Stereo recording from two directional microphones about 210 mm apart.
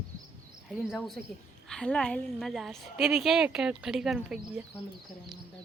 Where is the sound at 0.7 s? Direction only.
Centre (ahead or behind).